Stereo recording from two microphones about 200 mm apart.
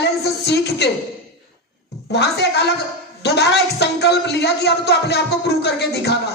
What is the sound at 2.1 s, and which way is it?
Speech, 55° left (ahead or behind).